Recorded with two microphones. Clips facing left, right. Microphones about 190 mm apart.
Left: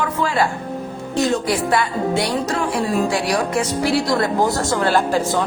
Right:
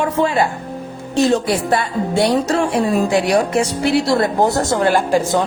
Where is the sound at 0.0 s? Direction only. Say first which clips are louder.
Right 3 dB; 25° right (ahead or behind).